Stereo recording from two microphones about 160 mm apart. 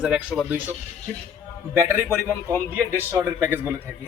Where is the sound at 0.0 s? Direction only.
5° right (ahead or behind).